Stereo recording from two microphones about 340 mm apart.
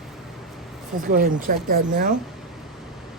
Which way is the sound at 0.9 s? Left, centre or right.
Right.